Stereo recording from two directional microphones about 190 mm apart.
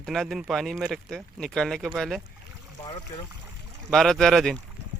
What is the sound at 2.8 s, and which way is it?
Speech, 25° left (ahead or behind).